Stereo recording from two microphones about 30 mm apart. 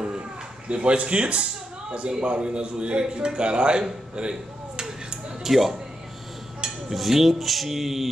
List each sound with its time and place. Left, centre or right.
0.7 s a man's voice: right
4.1 s a sound: right
5.4 s speech: centre
6.9 s speech: centre